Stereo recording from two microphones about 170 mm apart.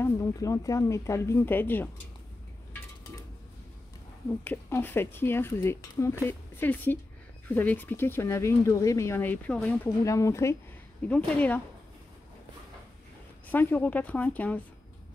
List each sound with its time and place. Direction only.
0.0 s speech: 20° left (ahead or behind)
4.5 s speech: 15° left (ahead or behind)
10.0 s speech: 15° left (ahead or behind)
13.5 s speech: 10° left (ahead or behind)